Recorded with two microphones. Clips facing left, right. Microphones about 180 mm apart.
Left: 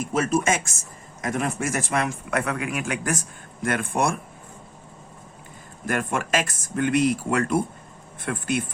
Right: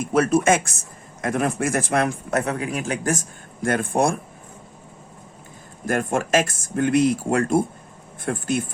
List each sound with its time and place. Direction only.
0.1 s speech: 60° right (ahead or behind)
2.4 s speech: 35° right (ahead or behind)
5.8 s speech: 45° right (ahead or behind)